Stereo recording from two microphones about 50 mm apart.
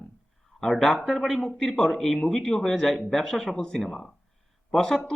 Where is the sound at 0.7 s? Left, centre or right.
Centre.